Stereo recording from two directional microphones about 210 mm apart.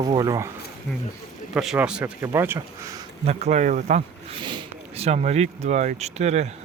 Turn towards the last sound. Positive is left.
turn(degrees=-30)  # may be behind; listen again after turning